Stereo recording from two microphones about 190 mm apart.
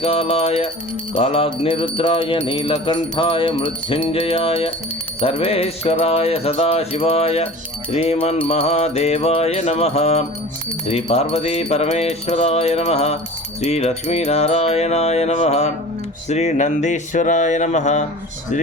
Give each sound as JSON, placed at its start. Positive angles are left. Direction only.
{"t": 0.0, "sound": "mantra", "side_deg": 30}